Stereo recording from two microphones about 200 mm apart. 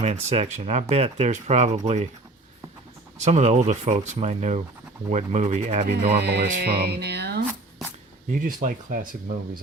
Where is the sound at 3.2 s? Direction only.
35° right (ahead or behind).